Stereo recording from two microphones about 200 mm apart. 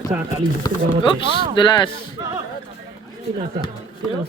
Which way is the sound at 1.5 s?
25° left (ahead or behind).